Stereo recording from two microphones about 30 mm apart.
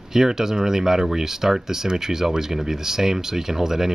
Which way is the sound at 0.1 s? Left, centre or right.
Centre.